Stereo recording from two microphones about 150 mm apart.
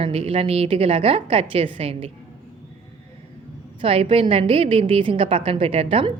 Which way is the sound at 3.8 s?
40° right (ahead or behind).